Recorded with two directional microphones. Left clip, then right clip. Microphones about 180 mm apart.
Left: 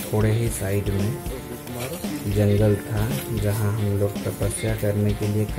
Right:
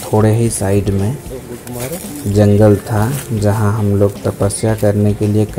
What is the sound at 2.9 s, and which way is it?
Speech, 5° right (ahead or behind).